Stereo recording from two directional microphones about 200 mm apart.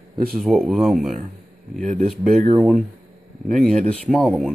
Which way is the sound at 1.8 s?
35° right (ahead or behind).